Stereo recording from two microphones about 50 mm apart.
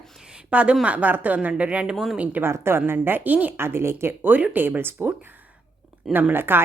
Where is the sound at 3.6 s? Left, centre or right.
Right.